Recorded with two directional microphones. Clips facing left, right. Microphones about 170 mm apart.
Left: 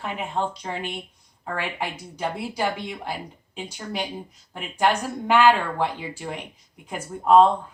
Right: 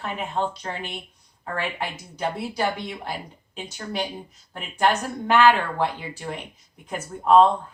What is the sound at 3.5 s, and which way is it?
Speech, 15° left (ahead or behind).